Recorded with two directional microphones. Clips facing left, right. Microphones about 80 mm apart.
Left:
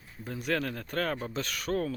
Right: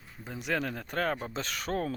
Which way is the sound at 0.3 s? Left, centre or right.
Centre.